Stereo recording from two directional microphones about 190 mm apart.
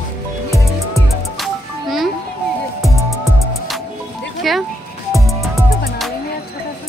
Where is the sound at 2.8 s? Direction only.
Centre (ahead or behind).